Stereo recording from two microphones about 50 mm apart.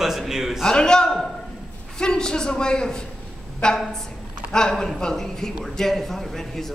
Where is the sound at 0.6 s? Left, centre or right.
Centre.